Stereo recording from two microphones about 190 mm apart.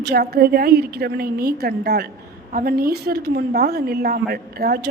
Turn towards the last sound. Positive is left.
turn(degrees=-55)  # may be behind; listen again after turning